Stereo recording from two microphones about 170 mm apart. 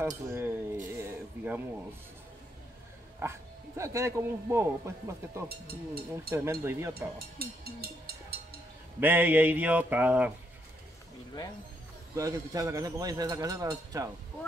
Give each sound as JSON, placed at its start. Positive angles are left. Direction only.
{"t": 0.0, "sound": "speech", "side_deg": -15}
{"t": 1.0, "sound": "a sound", "side_deg": -10}
{"t": 3.2, "sound": "speech", "side_deg": -15}
{"t": 5.5, "sound": "speech", "side_deg": -65}
{"t": 6.3, "sound": "speech", "side_deg": -15}
{"t": 7.2, "sound": "speech", "side_deg": -65}
{"t": 9.0, "sound": "speech", "side_deg": -10}
{"t": 12.2, "sound": "a man's voice", "side_deg": -20}